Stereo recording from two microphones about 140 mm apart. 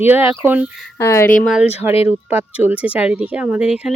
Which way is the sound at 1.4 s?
5° right (ahead or behind).